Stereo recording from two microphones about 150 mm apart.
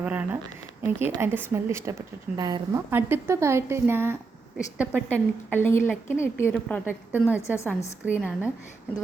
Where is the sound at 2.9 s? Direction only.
15° right (ahead or behind).